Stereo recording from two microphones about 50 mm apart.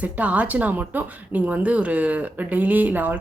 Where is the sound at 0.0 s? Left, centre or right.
Right.